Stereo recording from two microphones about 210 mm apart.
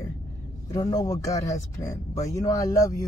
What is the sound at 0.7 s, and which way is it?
Speech, 15° left (ahead or behind).